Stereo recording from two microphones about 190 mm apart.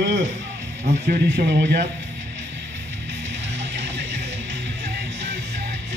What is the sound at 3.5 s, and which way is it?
Music, 70° right (ahead or behind).